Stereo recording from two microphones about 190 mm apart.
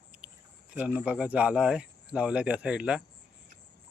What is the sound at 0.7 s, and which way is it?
Speech, 5° right (ahead or behind).